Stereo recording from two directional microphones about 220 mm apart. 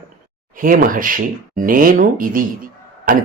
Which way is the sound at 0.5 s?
40° right (ahead or behind).